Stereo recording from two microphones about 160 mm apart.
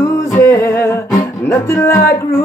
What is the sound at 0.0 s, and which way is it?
Music, 20° left (ahead or behind).